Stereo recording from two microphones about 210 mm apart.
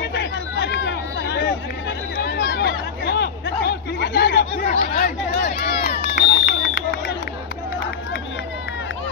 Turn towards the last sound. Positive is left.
turn(degrees=60)  # may be behind; listen again after turning